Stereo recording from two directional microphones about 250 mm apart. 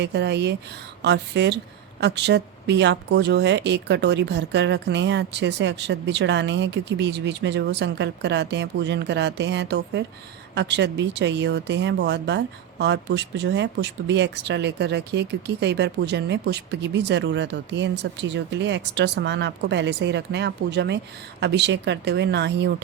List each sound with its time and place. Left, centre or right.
0.0 s speech: right